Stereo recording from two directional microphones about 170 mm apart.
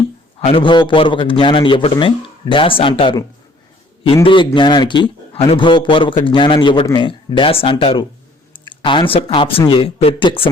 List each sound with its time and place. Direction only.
0.3 s a man's voice: 30° left (ahead or behind)